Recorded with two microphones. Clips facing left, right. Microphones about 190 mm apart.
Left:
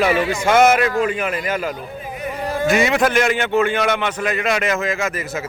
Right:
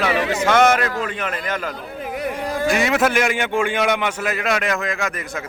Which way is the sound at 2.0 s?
75° right (ahead or behind).